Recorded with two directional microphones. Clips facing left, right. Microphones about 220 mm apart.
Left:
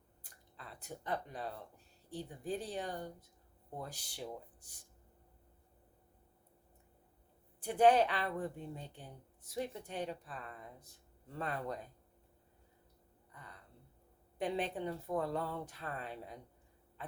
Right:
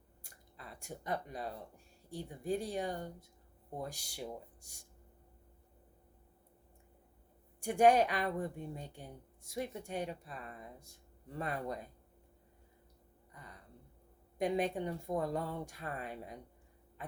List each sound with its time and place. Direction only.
0.2 s speech: 10° right (ahead or behind)
7.6 s speech: 10° right (ahead or behind)
13.3 s a sound: 10° right (ahead or behind)
14.3 s speech: 10° right (ahead or behind)